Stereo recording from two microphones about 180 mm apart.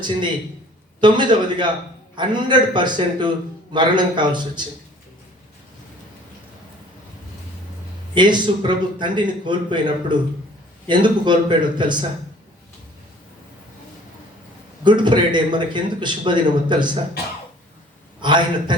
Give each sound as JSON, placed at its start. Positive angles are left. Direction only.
{"t": 1.0, "sound": "a man's voice", "side_deg": -25}
{"t": 8.1, "sound": "a man's voice", "side_deg": -25}
{"t": 14.8, "sound": "a man's voice", "side_deg": -25}
{"t": 18.2, "sound": "a man's voice", "side_deg": -25}